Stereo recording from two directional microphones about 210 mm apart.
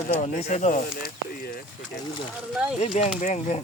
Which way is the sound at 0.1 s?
30° left (ahead or behind).